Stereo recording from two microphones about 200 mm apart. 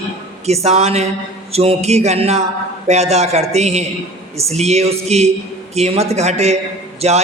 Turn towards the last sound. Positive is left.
turn(degrees=-30)  # may be behind; listen again after turning